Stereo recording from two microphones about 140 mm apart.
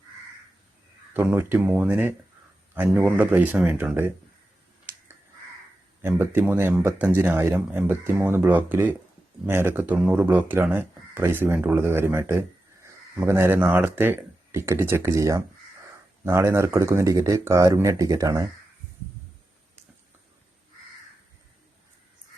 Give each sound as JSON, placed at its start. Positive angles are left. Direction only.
{"t": 1.1, "sound": "speech", "side_deg": -15}
{"t": 6.0, "sound": "speech", "side_deg": -15}